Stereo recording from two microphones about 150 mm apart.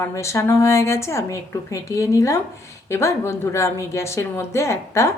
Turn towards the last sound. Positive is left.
turn(degrees=20)  # may be behind; listen again after turning